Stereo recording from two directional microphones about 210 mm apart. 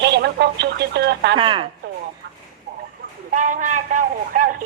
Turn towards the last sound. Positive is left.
turn(degrees=-40)  # may be behind; listen again after turning